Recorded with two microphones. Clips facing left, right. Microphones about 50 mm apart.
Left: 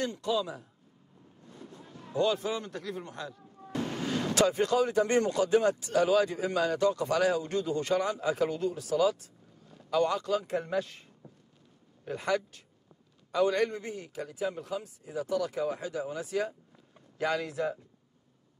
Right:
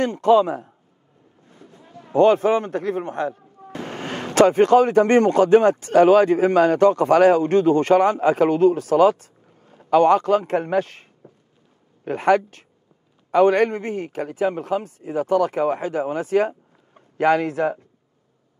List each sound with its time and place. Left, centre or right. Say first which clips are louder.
0.0 s a man's voice: right 14 dB; right
1.6 s a sound: right 1 dB; right
2.1 s a man's voice: right 13 dB; right